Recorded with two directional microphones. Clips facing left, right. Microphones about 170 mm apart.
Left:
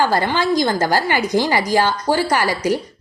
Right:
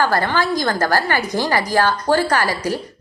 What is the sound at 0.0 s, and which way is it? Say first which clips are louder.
A woman's voice: left 1 dB; 15° left (ahead or behind).